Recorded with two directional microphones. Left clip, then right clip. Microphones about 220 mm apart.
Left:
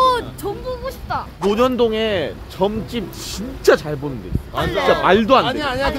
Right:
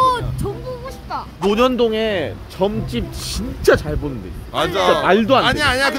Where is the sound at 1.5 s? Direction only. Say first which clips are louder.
Right 1 dB; 10° right (ahead or behind).